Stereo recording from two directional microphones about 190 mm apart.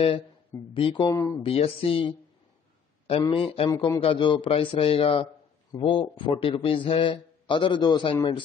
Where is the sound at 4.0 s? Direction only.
25° left (ahead or behind).